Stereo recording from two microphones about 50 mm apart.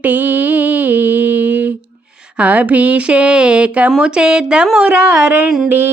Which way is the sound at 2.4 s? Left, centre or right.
Right.